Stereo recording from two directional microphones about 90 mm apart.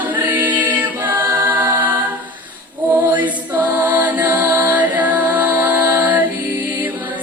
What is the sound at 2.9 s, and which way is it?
Music, 20° right (ahead or behind).